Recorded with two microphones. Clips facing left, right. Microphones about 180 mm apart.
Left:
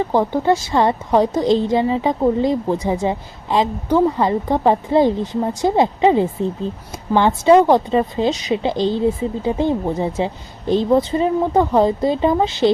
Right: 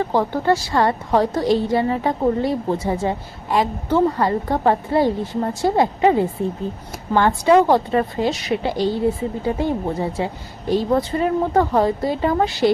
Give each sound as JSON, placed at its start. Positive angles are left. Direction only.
{"t": 0.0, "sound": "a woman's voice", "side_deg": 15}